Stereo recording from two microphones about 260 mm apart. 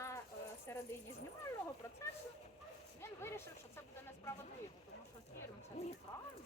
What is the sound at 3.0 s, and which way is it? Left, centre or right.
Speech, centre.